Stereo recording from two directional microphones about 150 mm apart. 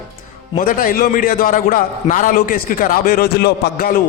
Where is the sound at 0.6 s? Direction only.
70° left (ahead or behind).